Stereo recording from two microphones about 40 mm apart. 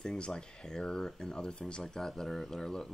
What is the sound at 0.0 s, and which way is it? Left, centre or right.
Speech, centre.